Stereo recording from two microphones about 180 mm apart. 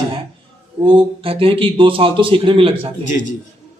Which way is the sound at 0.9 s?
30° right (ahead or behind).